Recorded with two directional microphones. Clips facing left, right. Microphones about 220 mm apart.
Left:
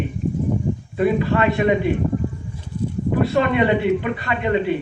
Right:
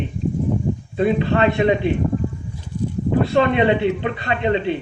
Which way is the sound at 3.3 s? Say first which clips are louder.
Right 2 dB; 25° right (ahead or behind).